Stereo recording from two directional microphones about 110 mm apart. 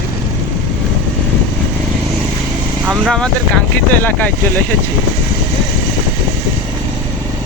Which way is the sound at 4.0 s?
15° left (ahead or behind).